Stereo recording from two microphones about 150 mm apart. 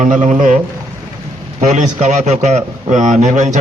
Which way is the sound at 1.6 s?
55° right (ahead or behind).